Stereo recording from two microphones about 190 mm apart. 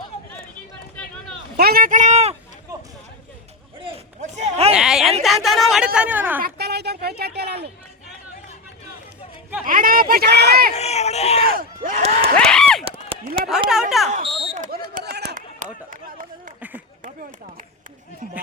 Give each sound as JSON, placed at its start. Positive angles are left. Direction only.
{"t": 1.5, "sound": "speech", "side_deg": -55}
{"t": 3.8, "sound": "a sound", "side_deg": -30}
{"t": 4.7, "sound": "speech", "side_deg": -5}
{"t": 6.4, "sound": "a woman's voice", "side_deg": -60}
{"t": 9.6, "sound": "speech", "side_deg": -45}
{"t": 10.8, "sound": "speech", "side_deg": 35}
{"t": 11.4, "sound": "speech", "side_deg": -45}
{"t": 12.4, "sound": "speech", "side_deg": 5}
{"t": 14.1, "sound": "smoke detector", "side_deg": -30}
{"t": 14.9, "sound": "a sound", "side_deg": -55}
{"t": 15.5, "sound": "a sound", "side_deg": -45}
{"t": 16.6, "sound": "a sound", "side_deg": -10}